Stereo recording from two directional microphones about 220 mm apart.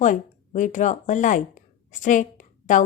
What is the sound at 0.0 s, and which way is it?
A woman's voice, 35° left (ahead or behind).